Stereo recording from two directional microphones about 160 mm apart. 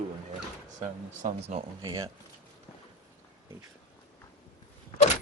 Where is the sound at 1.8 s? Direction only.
20° right (ahead or behind).